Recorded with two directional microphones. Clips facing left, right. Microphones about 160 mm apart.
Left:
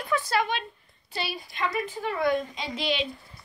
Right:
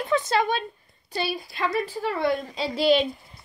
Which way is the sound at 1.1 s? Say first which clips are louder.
Right 5 dB; 35° right (ahead or behind).